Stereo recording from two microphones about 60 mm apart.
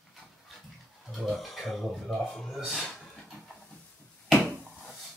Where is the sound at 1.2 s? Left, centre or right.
Centre.